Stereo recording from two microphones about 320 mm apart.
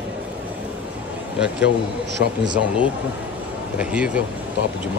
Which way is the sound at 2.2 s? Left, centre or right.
Left.